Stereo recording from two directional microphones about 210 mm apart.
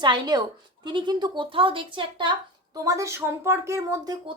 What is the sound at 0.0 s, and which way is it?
A woman's voice, 20° right (ahead or behind).